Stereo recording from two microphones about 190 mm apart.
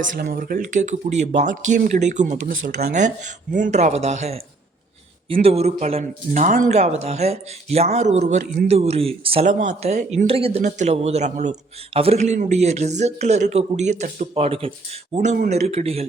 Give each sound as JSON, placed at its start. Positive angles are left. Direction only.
{"t": 0.0, "sound": "speech", "side_deg": -50}